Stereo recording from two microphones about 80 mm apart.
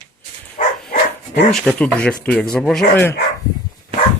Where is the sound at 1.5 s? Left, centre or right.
Centre.